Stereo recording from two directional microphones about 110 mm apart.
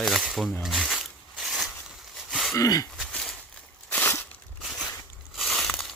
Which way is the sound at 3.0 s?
5° left (ahead or behind).